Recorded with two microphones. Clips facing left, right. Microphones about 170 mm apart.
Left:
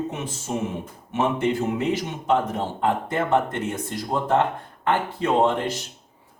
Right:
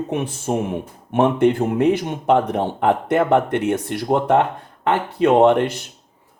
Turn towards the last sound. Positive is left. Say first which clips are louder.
# right 7 dB
turn(degrees=-70)  # may be behind; listen again after turning